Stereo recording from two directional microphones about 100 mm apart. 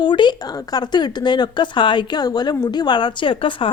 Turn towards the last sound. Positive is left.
turn(degrees=60)  # may be behind; listen again after turning